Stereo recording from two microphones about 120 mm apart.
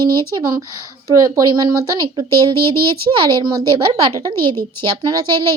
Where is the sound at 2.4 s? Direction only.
45° right (ahead or behind).